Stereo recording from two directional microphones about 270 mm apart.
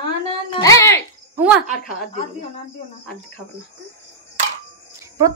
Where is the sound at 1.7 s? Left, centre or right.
Left.